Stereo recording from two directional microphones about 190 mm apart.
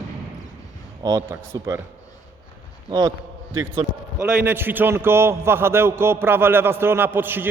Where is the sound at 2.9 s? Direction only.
20° right (ahead or behind).